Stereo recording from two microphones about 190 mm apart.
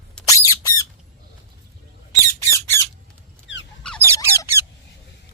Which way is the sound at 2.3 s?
15° left (ahead or behind).